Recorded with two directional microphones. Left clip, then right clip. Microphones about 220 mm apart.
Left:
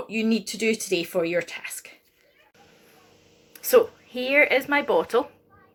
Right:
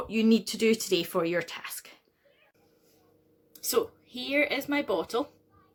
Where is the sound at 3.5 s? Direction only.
50° right (ahead or behind).